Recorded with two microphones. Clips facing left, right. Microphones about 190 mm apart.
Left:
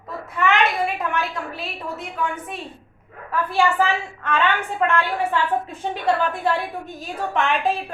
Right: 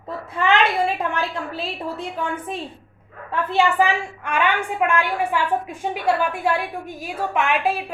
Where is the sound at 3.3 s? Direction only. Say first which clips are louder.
Right 1 dB; 20° right (ahead or behind).